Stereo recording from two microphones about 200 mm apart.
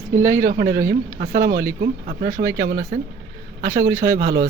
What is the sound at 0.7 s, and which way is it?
Speech, 15° right (ahead or behind).